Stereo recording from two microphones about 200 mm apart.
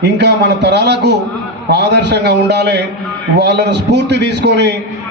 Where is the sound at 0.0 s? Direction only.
60° right (ahead or behind).